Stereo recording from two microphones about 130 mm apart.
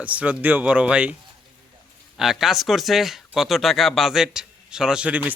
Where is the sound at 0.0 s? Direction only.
10° right (ahead or behind).